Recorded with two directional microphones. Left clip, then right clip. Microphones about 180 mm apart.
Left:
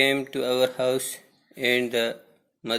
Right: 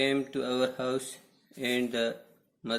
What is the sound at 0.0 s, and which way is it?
A man's voice, 15° left (ahead or behind).